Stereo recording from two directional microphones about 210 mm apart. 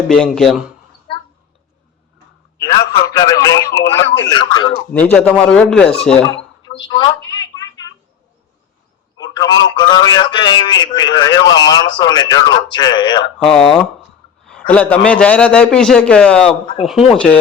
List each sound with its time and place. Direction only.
0.1 s a man's voice: centre (ahead or behind)
2.6 s a man's voice: 15° left (ahead or behind)
4.0 s speech: 60° left (ahead or behind)
4.3 s a man's voice: 20° left (ahead or behind)
5.1 s a man's voice: 5° left (ahead or behind)
6.7 s a man's voice: 20° left (ahead or behind)
7.2 s speech: 65° left (ahead or behind)
7.4 s a sound: 20° left (ahead or behind)
9.1 s telephone: 20° left (ahead or behind)
9.7 s a man's voice: 20° left (ahead or behind)
13.4 s a man's voice: 5° left (ahead or behind)